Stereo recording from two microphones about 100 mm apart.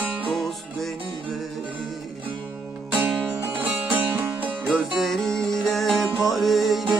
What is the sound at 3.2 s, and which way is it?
Music, 15° right (ahead or behind).